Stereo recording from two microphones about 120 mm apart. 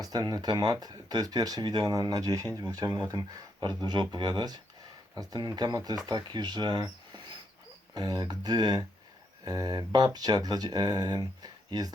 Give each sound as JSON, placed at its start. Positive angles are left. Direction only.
{"t": 0.0, "sound": "speech", "side_deg": -30}